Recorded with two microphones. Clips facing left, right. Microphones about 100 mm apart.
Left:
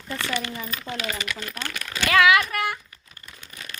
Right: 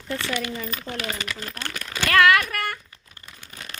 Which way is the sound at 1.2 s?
35° right (ahead or behind).